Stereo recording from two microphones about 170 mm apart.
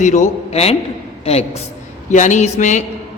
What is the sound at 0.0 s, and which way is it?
A man's voice, 45° left (ahead or behind).